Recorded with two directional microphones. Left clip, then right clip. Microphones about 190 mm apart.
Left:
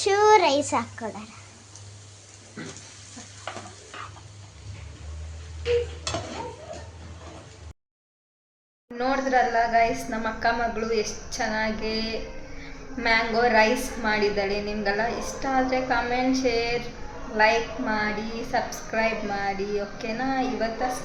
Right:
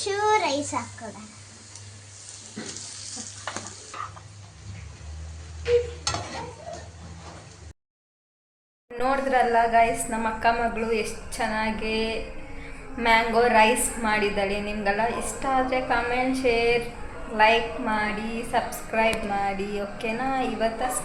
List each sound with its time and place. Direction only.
0.0 s a child's voice: 30° left (ahead or behind)
9.0 s a woman's voice: 10° left (ahead or behind)